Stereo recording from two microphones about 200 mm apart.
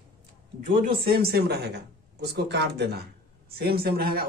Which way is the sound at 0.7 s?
50° right (ahead or behind).